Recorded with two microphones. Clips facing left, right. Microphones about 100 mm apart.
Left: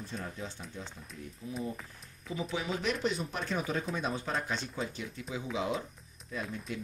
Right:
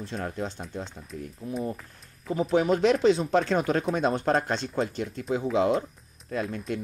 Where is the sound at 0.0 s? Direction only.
80° right.